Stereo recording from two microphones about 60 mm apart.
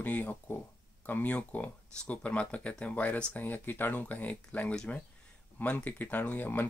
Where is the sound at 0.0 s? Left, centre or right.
Left.